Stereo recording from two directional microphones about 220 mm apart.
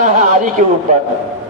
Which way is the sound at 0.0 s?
35° right (ahead or behind).